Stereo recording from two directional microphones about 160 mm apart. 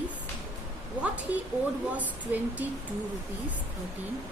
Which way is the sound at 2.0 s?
10° right (ahead or behind).